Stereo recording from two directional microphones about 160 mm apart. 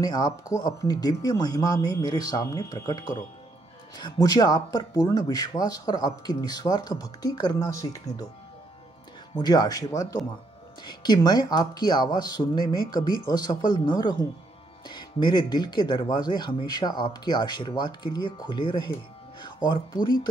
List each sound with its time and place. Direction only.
0.0 s speech: 25° left (ahead or behind)
9.3 s speech: 25° left (ahead or behind)